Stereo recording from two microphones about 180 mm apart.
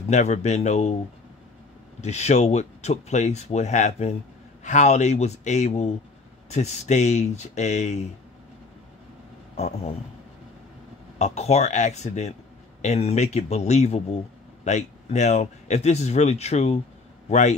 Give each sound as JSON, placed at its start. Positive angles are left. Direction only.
{"t": 0.1, "sound": "speech", "side_deg": 40}
{"t": 2.0, "sound": "speech", "side_deg": 40}
{"t": 9.6, "sound": "speech", "side_deg": 35}
{"t": 11.1, "sound": "speech", "side_deg": 40}